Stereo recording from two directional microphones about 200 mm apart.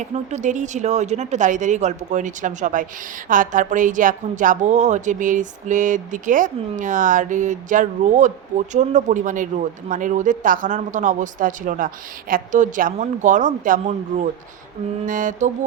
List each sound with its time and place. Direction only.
0.0 s a woman's voice: 35° right (ahead or behind)